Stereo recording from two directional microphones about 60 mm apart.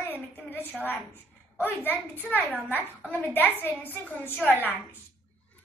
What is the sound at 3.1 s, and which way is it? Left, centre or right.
A child's voice, left.